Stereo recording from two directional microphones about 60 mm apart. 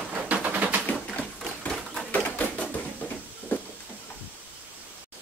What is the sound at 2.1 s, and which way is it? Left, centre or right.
Bird, left.